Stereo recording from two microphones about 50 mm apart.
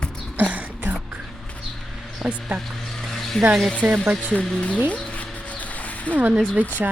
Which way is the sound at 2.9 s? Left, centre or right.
Centre.